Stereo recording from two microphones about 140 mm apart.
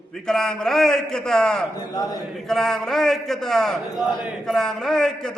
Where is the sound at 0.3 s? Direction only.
5° left (ahead or behind).